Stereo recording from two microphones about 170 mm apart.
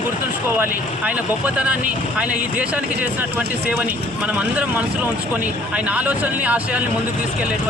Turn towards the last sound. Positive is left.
turn(degrees=-10)  # may be behind; listen again after turning